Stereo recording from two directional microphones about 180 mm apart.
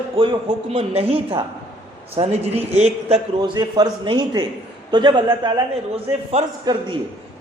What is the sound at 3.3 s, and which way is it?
A man's voice, 20° right (ahead or behind).